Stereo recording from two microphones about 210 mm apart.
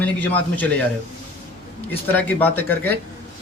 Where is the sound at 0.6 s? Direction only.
5° left (ahead or behind).